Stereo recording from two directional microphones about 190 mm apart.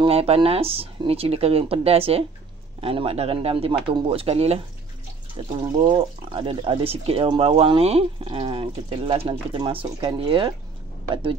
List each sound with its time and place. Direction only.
0.0 s speech: 30° right (ahead or behind)